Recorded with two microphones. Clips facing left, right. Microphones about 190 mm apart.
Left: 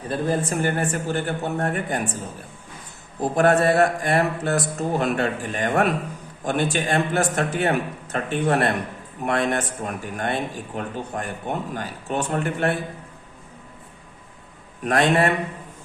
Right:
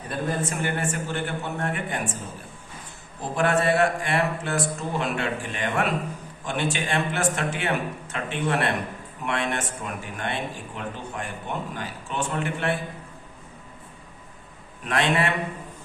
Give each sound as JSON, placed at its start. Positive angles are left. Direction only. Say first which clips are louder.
{"t": 0.1, "sound": "a man's voice", "louder": "left 4 dB", "side_deg": 35}
{"t": 3.2, "sound": "a man's voice", "louder": "left 5 dB", "side_deg": 40}
{"t": 14.8, "sound": "speech", "louder": "left 5 dB", "side_deg": 40}